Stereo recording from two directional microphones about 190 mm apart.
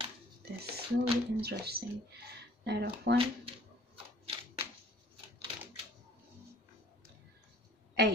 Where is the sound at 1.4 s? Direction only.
55° right (ahead or behind).